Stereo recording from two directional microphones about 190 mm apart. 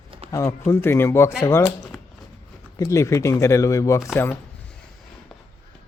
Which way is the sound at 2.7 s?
15° left (ahead or behind).